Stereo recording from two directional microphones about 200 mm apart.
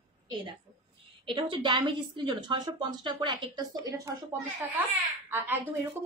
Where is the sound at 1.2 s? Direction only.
25° right (ahead or behind); by 4.8 s 10° right (ahead or behind).